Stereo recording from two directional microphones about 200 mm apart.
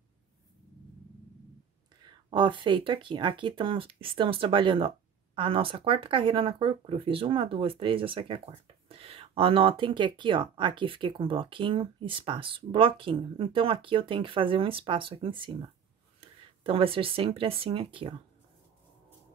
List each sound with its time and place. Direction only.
2.0 s speech: 25° right (ahead or behind)